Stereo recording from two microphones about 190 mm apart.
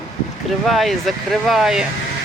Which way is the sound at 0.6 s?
Centre (ahead or behind).